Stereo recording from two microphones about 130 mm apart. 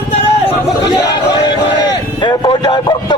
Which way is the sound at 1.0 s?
35° left (ahead or behind).